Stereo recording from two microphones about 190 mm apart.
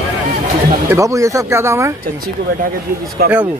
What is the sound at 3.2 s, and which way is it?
Speech, 50° right (ahead or behind).